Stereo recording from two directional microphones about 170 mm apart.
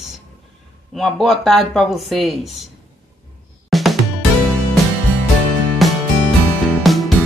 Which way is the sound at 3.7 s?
Centre (ahead or behind).